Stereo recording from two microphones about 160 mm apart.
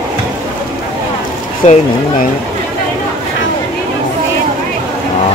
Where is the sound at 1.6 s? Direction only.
45° left (ahead or behind).